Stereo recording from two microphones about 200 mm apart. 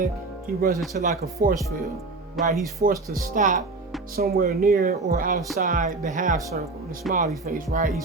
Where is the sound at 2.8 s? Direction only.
45° right (ahead or behind).